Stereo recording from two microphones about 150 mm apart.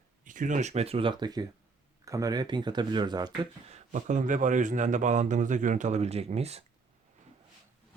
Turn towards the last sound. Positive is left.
turn(degrees=-45)  # may be behind; listen again after turning